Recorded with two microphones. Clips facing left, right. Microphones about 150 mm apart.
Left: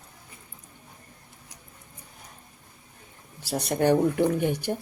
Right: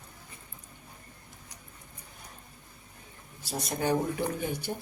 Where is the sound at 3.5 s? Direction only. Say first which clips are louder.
Left 7 dB; 70° left (ahead or behind).